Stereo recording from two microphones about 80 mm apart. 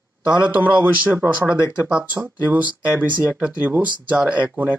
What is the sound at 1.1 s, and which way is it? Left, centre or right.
Speech, right.